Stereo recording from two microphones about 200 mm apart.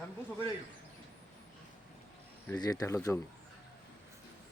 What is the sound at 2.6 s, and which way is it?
Speech, 20° left (ahead or behind).